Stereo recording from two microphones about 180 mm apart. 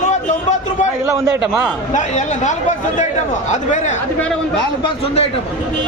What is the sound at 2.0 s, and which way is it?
A man's voice, 40° left (ahead or behind).